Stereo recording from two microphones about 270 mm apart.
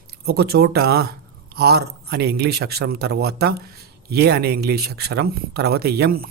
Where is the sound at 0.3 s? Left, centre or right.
Right.